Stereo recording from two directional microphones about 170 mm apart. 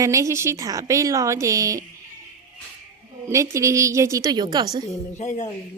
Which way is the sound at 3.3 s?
20° right (ahead or behind).